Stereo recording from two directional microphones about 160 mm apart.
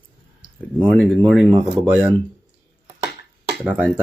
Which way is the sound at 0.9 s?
5° left (ahead or behind).